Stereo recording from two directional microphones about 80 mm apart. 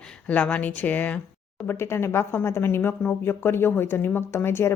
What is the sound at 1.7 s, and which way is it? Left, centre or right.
Speech, left.